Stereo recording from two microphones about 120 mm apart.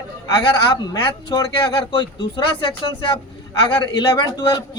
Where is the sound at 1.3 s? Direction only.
40° left (ahead or behind).